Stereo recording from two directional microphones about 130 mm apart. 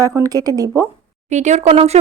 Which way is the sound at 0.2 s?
30° right (ahead or behind).